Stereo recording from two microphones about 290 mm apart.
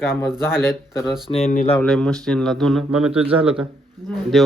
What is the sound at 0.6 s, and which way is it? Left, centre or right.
Speech, centre.